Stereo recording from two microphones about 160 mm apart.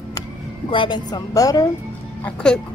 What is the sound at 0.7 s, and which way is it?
Speech, 30° left (ahead or behind).